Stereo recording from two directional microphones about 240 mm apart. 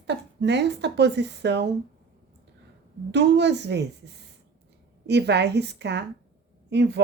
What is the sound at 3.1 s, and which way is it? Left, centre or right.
A woman's voice, right.